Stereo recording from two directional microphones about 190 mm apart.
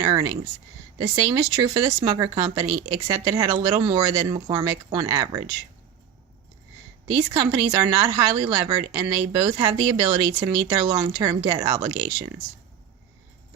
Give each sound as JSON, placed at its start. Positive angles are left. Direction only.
{"t": 0.0, "sound": "speech", "side_deg": -25}
{"t": 7.3, "sound": "speech", "side_deg": -25}